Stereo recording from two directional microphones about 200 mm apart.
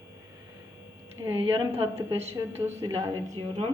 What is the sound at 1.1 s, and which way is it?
A woman's voice, 10° right (ahead or behind).